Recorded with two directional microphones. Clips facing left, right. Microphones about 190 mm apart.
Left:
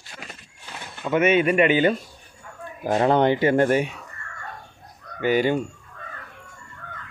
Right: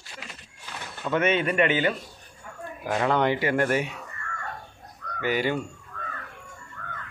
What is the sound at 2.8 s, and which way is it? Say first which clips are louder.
Speech: left 5 dB; 30° left (ahead or behind).